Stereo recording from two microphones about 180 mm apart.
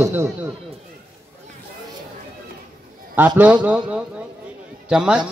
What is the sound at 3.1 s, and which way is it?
A man's voice, 10° right (ahead or behind).